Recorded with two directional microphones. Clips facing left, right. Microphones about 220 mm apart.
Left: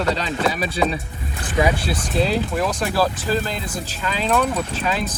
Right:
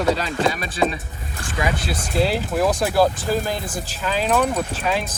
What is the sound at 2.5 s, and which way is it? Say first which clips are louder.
Speech: right 3 dB; 10° right (ahead or behind).